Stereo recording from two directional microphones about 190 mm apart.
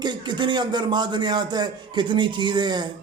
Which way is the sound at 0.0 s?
25° right (ahead or behind).